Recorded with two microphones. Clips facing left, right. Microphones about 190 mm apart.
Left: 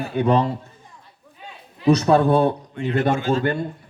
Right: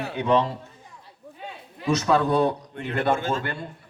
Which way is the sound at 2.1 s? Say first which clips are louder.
Left 5 dB; 50° left (ahead or behind).